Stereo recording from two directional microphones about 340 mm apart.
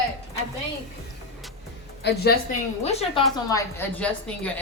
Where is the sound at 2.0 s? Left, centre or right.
Left.